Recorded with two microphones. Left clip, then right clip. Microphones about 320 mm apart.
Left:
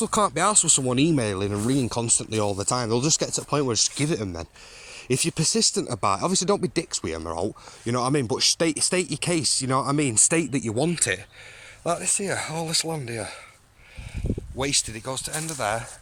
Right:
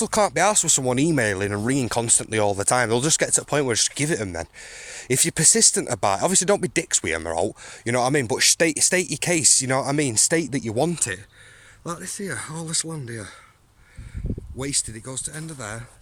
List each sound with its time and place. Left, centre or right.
0.0 s speech: centre
11.9 s speech: centre
14.3 s a sound: left
14.6 s speech: centre